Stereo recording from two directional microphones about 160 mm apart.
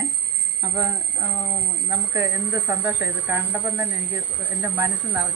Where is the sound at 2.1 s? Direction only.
15° right (ahead or behind).